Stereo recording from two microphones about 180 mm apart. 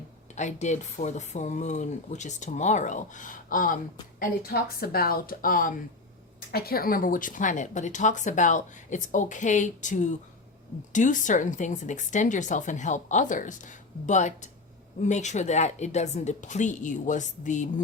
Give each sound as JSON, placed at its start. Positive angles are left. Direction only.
{"t": 0.3, "sound": "a woman's voice", "side_deg": 40}